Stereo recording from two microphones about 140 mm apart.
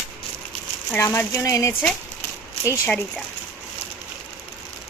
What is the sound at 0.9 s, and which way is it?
Speech, 20° left (ahead or behind).